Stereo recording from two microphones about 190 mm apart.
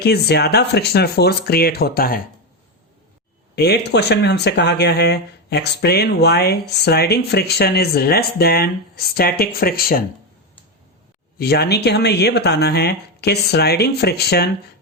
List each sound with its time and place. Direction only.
0.0 s speech: 60° left (ahead or behind)
3.5 s speech: 60° left (ahead or behind)
11.3 s speech: 55° left (ahead or behind)